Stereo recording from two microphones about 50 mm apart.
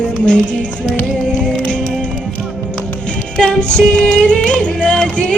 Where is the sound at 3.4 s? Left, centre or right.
Centre.